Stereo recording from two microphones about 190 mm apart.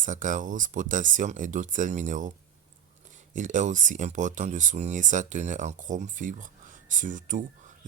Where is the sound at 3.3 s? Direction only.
40° right (ahead or behind).